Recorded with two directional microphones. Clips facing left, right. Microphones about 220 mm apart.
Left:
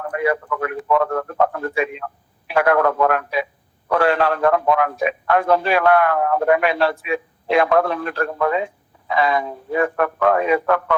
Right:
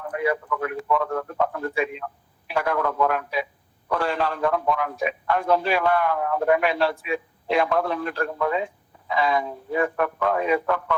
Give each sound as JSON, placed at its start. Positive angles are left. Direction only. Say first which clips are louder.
{"t": 0.0, "sound": "a man's voice", "louder": "left 4 dB", "side_deg": 70}